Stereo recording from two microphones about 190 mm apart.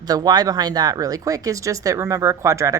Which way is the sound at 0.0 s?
20° right (ahead or behind).